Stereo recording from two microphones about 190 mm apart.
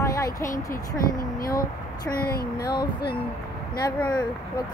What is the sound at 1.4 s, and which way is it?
Speech, 50° left (ahead or behind).